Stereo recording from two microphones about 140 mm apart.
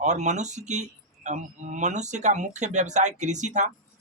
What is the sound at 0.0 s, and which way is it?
Speech, 55° right (ahead or behind).